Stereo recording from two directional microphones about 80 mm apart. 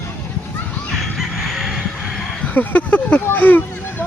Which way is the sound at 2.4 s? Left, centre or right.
Centre.